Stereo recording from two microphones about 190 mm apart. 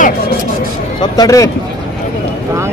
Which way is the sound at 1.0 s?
20° left (ahead or behind).